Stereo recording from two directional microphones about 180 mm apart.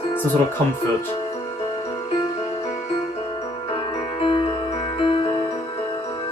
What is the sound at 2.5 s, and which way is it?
Glockenspiel, 35° left (ahead or behind).